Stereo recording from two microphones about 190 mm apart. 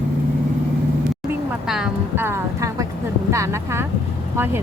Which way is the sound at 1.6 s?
5° right (ahead or behind).